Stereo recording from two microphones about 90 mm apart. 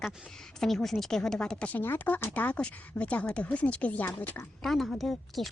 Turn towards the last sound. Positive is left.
turn(degrees=0)  # may be behind; listen again after turning